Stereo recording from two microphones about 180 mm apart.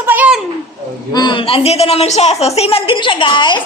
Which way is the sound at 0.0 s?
10° right (ahead or behind).